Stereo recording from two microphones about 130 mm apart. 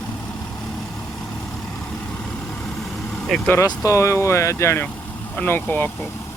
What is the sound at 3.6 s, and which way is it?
Speech, 25° left (ahead or behind).